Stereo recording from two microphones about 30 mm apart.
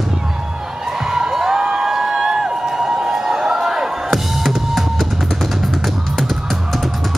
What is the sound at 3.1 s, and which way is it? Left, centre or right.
Music, centre.